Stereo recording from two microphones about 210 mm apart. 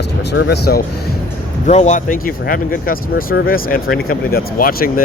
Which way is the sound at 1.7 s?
35° left (ahead or behind).